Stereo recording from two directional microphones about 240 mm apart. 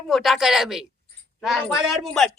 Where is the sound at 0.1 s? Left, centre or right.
Centre.